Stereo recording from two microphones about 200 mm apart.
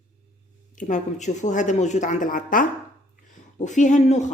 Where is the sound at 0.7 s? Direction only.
40° left (ahead or behind).